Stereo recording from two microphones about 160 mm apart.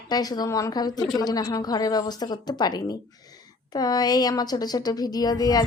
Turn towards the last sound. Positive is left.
turn(degrees=25)  # may be behind; listen again after turning